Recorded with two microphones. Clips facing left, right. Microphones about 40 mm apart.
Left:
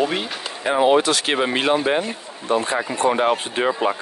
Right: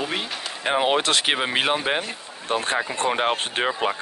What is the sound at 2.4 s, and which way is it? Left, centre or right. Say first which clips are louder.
Speech: left 3 dB; right.